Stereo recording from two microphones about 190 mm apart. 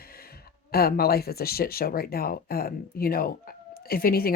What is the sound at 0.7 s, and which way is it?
Speech, 55° left (ahead or behind).